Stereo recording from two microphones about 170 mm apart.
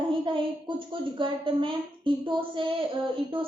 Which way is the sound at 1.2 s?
30° right (ahead or behind).